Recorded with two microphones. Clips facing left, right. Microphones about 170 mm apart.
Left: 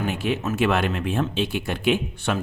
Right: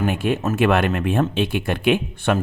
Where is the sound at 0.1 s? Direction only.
50° right (ahead or behind).